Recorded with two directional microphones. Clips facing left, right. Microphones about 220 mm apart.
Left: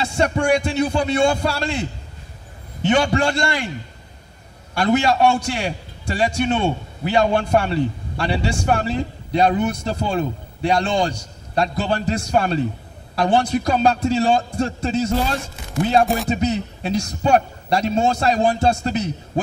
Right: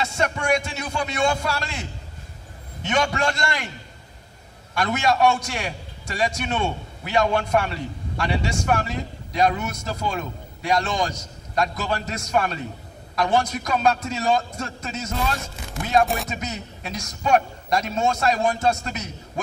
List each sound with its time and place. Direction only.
0.0 s a man's voice: 30° left (ahead or behind)
4.7 s a man's voice: 30° left (ahead or behind)